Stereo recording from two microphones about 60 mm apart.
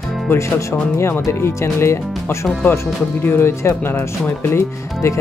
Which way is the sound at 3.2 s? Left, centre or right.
Left.